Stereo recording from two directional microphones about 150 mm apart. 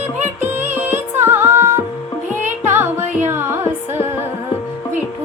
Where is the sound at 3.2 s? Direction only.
15° right (ahead or behind).